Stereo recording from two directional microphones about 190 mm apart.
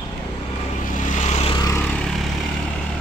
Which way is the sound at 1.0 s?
40° left (ahead or behind).